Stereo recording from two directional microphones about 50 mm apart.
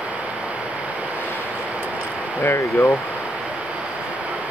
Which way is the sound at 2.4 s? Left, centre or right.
Left.